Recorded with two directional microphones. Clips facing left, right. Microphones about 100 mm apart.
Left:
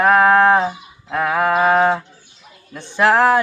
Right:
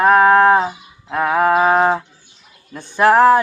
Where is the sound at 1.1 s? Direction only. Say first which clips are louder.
Right 2 dB; 25° right (ahead or behind).